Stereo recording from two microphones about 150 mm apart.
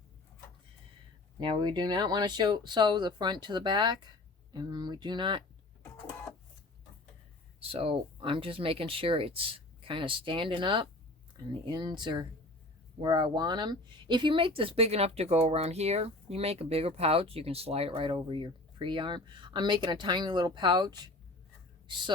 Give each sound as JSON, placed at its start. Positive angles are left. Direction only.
{"t": 1.4, "sound": "speech", "side_deg": -30}
{"t": 7.7, "sound": "speech", "side_deg": -35}